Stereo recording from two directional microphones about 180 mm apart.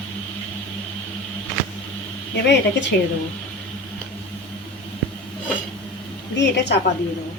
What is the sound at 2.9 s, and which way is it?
Speech, 60° left (ahead or behind).